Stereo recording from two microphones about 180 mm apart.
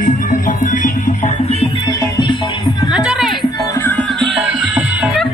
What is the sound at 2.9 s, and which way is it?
Music, 5° right (ahead or behind).